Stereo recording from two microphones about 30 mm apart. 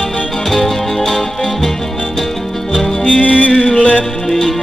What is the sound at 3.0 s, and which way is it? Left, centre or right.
Music, left.